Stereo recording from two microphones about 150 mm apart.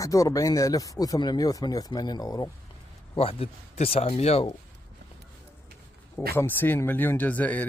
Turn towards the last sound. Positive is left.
turn(degrees=10)  # may be behind; listen again after turning